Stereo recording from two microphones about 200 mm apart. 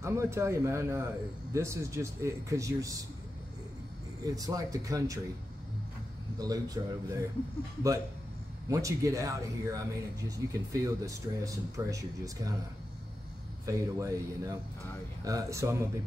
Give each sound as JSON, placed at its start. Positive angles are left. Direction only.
{"t": 0.0, "sound": "speech", "side_deg": -15}
{"t": 4.4, "sound": "speech", "side_deg": -15}
{"t": 6.3, "sound": "speech", "side_deg": -20}
{"t": 8.6, "sound": "speech", "side_deg": -15}
{"t": 13.7, "sound": "speech", "side_deg": -15}